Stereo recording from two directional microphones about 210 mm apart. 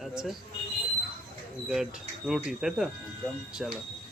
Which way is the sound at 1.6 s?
Centre (ahead or behind).